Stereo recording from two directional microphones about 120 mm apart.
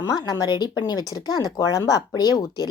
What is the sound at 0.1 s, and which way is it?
A woman's voice, 30° left (ahead or behind).